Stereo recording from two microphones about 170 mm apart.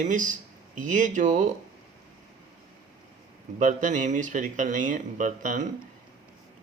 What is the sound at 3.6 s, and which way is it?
Speech, 50° right (ahead or behind).